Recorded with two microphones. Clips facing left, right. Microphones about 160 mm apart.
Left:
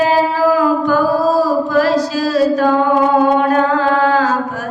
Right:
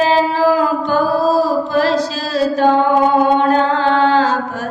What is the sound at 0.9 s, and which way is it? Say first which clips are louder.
Mantra: left 1 dB; 30° right (ahead or behind).